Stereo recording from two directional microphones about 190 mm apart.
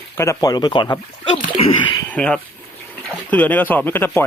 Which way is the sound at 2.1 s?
5° left (ahead or behind).